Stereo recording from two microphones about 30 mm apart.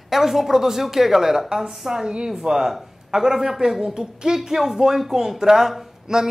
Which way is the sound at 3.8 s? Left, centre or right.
Right.